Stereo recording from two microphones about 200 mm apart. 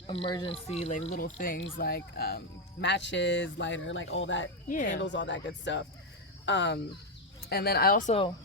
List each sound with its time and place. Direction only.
0.1 s a man's voice: 25° left (ahead or behind)
1.1 s speech: 45° left (ahead or behind); by 6.7 s 60° left (ahead or behind)
7.5 s speech: 50° left (ahead or behind)